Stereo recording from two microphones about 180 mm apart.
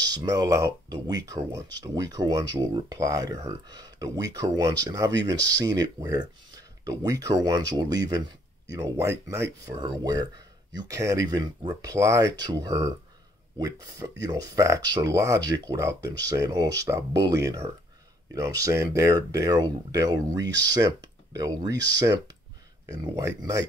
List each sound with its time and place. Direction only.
0.0 s speech: 20° right (ahead or behind)